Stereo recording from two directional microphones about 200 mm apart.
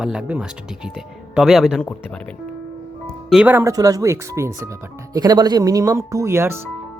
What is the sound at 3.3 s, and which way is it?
Speech, 10° right (ahead or behind).